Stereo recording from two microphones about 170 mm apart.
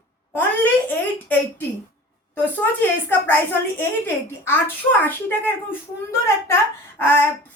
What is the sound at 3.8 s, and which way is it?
Speech, 15° left (ahead or behind).